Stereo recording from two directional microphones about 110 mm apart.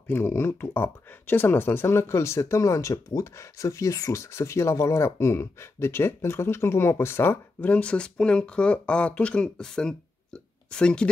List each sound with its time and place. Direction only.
0.0 s speech: 20° left (ahead or behind)